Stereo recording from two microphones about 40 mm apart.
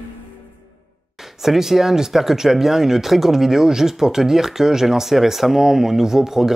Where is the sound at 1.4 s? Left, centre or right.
Centre.